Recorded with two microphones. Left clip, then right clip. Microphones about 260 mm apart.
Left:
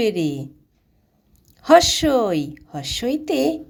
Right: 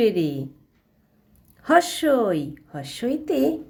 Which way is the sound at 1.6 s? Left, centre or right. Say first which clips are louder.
Left 5 dB; left.